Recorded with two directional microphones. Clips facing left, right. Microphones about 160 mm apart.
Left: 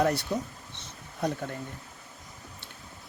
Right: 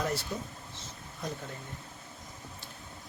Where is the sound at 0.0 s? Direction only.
60° left (ahead or behind).